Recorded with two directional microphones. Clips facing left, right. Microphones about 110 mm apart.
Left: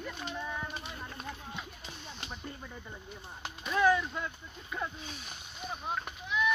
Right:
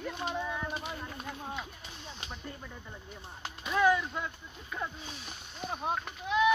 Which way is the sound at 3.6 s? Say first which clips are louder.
Even; 5° right (ahead or behind).